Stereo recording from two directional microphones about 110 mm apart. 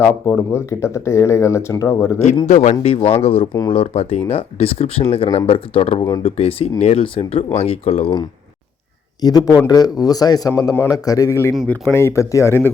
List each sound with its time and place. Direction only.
0.0 s speech: 25° left (ahead or behind)
2.5 s speech: 90° left
2.8 s speech: 60° left (ahead or behind)
9.2 s a man's voice: 35° left (ahead or behind)